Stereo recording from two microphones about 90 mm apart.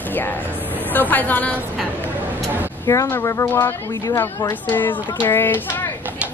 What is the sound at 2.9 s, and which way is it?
Speech, 25° left (ahead or behind).